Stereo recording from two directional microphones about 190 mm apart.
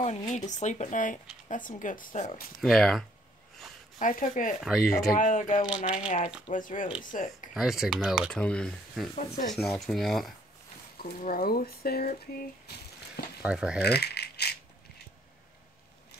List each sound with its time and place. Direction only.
0.3 s speech: 40° left (ahead or behind)
2.6 s speech: centre (ahead or behind)
4.0 s speech: 45° left (ahead or behind)
4.6 s speech: centre (ahead or behind)
5.1 s speech: 40° left (ahead or behind)
7.5 s speech: centre (ahead or behind)
9.1 s speech: 40° left (ahead or behind)
9.7 s speech: centre (ahead or behind)
11.0 s speech: 50° left (ahead or behind)
13.4 s speech: 5° right (ahead or behind)
13.8 s rattle: 60° left (ahead or behind)